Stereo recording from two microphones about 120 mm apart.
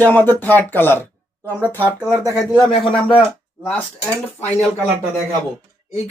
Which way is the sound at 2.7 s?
55° left (ahead or behind).